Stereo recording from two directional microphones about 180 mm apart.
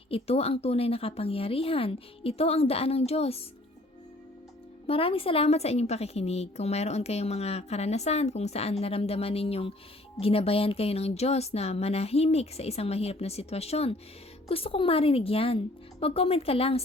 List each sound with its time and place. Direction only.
0.1 s a woman's voice: 35° left (ahead or behind)
4.9 s a woman's voice: 30° left (ahead or behind)